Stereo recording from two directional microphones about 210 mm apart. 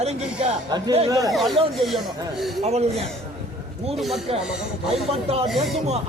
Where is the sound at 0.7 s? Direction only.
20° right (ahead or behind).